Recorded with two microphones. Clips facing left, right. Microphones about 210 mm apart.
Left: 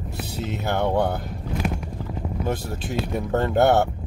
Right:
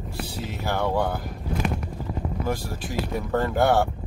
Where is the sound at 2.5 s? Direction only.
20° left (ahead or behind).